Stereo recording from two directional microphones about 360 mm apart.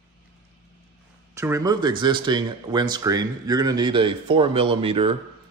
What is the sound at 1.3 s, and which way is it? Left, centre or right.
Speech, centre.